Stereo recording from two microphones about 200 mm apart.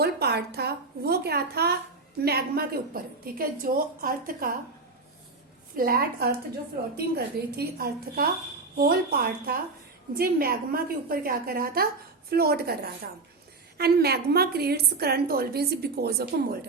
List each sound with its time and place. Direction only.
0.0 s a woman's voice: 55° right (ahead or behind)
5.7 s a woman's voice: 50° right (ahead or behind)